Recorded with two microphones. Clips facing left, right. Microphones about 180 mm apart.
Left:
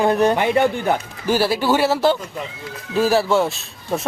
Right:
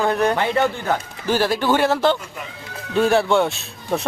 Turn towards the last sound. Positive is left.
turn(degrees=0)  # may be behind; listen again after turning